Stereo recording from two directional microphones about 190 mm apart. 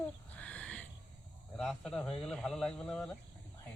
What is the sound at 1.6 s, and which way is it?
Speech, 5° left (ahead or behind).